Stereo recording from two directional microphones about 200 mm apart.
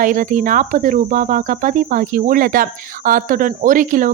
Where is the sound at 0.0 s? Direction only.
40° right (ahead or behind).